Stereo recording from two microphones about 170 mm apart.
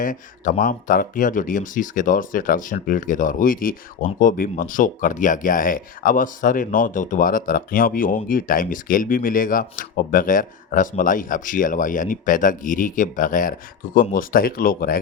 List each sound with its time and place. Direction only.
0.0 s speech: 50° left (ahead or behind)